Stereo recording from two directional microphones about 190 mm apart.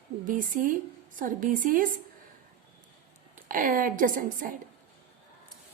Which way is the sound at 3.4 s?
45° right (ahead or behind).